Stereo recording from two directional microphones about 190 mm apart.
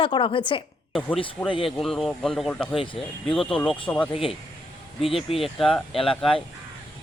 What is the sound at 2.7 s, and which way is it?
Speech, 25° left (ahead or behind).